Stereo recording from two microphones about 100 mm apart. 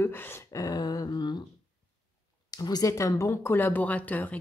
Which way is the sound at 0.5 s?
40° left (ahead or behind).